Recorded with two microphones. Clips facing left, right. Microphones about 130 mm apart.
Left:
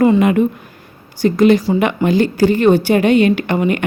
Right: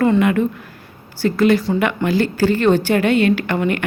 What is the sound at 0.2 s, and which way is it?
A woman's voice, 20° left (ahead or behind).